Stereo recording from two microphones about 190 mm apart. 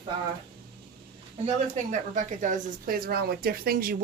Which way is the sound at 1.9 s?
40° right (ahead or behind).